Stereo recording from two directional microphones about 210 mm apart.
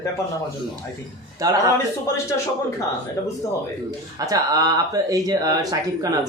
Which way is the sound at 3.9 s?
15° right (ahead or behind).